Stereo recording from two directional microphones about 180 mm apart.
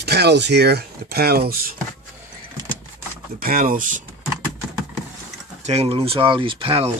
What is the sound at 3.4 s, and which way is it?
Speech, 55° right (ahead or behind).